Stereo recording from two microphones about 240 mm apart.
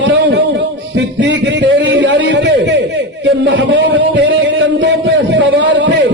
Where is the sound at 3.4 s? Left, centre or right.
Right.